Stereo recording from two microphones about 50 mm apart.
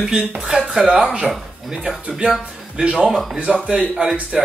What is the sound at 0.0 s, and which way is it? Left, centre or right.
Speech, centre.